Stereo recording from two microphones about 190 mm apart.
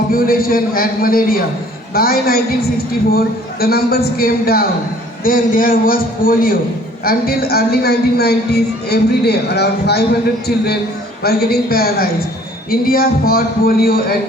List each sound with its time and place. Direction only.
0.1 s a man's voice: 50° left (ahead or behind)